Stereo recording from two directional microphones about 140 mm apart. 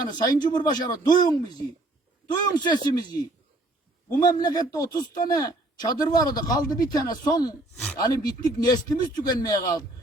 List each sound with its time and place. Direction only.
0.0 s speech: 30° left (ahead or behind)
4.2 s speech: 30° left (ahead or behind)